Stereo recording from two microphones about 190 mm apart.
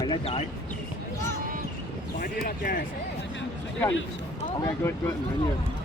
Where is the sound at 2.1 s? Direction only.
45° left (ahead or behind).